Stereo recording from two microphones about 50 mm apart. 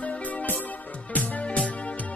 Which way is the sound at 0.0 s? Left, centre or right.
Left.